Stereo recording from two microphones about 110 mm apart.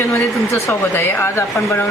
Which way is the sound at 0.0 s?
25° left (ahead or behind).